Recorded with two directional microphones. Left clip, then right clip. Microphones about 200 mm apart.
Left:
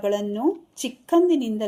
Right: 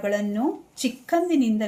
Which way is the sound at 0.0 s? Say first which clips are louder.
Left 2 dB; 40° left (ahead or behind).